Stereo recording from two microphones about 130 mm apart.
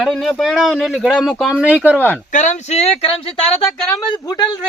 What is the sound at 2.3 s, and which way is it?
Speech, 70° left (ahead or behind).